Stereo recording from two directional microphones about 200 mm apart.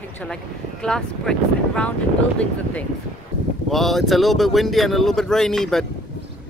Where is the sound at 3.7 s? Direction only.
Centre (ahead or behind).